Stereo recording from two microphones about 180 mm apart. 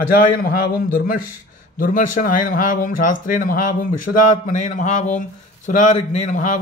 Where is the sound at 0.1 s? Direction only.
55° left (ahead or behind).